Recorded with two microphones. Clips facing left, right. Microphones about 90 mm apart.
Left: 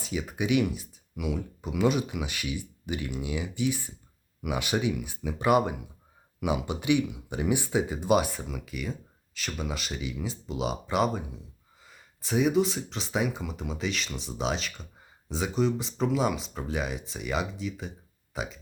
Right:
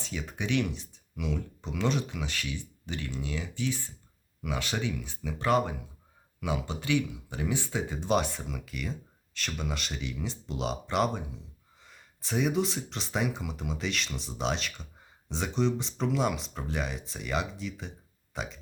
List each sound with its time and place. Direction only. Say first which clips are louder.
0.0 s speech: left 5 dB; 10° left (ahead or behind)